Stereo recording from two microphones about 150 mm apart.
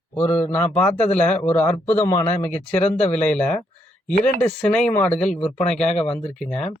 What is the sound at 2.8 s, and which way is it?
Speech, 50° left (ahead or behind).